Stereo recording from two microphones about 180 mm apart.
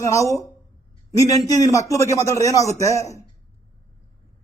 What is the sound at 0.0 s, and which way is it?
A man's voice, 15° left (ahead or behind).